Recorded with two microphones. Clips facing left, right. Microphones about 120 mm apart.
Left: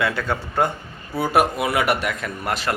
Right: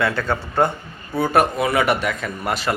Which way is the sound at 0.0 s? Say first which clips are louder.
Right 2 dB; 10° left (ahead or behind).